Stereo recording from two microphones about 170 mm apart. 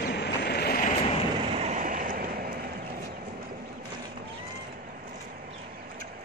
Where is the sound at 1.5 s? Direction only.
45° right (ahead or behind); by 2.6 s 60° right (ahead or behind).